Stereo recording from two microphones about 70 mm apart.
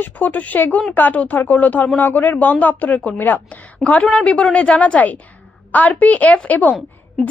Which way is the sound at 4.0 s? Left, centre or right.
Centre.